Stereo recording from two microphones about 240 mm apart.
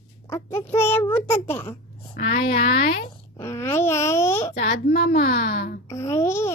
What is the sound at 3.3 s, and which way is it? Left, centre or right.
A child's voice, centre.